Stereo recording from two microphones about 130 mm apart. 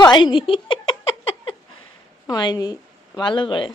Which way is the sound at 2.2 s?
30° left (ahead or behind).